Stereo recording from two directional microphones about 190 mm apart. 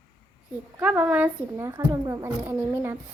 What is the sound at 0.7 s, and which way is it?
Speech, 10° right (ahead or behind).